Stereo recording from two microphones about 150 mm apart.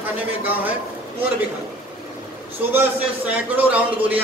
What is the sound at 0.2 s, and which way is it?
Speech, 10° right (ahead or behind).